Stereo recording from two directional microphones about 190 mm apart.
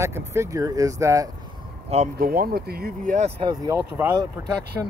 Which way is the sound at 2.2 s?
50° right (ahead or behind).